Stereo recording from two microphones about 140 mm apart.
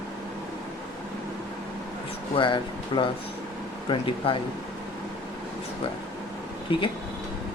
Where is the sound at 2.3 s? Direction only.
35° left (ahead or behind).